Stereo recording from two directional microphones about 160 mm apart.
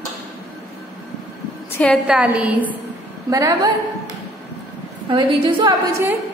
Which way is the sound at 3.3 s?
20° right (ahead or behind).